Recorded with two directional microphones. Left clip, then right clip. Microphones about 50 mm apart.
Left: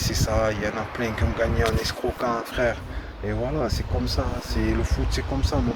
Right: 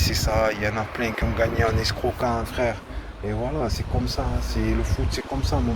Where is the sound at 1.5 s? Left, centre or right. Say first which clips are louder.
Right 1 dB; left.